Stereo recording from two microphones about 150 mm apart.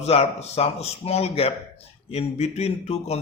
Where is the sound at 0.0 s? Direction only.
45° left (ahead or behind).